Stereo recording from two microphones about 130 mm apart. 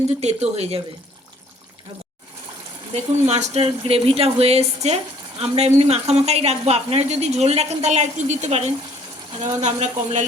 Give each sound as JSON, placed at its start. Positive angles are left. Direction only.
{"t": 0.2, "sound": "speech", "side_deg": -55}
{"t": 2.9, "sound": "speech", "side_deg": -55}